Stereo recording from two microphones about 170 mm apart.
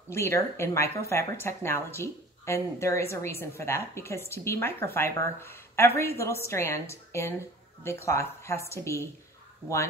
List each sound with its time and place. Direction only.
0.1 s speech: 15° left (ahead or behind)